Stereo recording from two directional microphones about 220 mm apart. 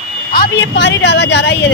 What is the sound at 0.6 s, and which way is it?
Speech, 55° left (ahead or behind).